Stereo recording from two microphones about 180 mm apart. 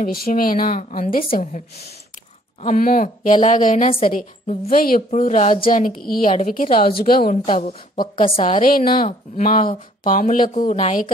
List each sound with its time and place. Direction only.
0.0 s a woman's voice: 55° left (ahead or behind)
7.4 s a woman's voice: 40° left (ahead or behind)